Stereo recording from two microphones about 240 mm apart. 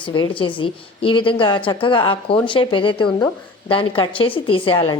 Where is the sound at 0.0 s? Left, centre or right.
Centre.